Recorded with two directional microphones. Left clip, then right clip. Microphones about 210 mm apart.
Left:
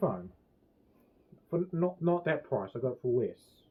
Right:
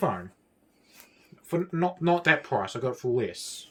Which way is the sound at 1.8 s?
65° right (ahead or behind).